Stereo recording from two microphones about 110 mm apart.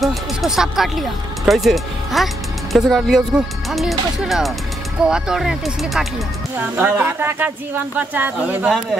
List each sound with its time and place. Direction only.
0.0 s speech: centre (ahead or behind)
6.6 s speech: 15° right (ahead or behind)